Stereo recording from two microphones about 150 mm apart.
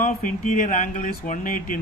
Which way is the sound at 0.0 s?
60° left (ahead or behind).